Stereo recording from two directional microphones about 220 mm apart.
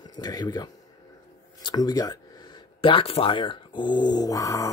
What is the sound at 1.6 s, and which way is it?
Speech, 20° left (ahead or behind).